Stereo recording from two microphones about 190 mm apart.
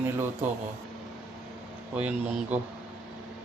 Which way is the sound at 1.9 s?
5° right (ahead or behind).